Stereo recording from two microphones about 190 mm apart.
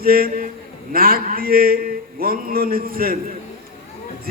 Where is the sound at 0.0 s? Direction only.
50° right (ahead or behind).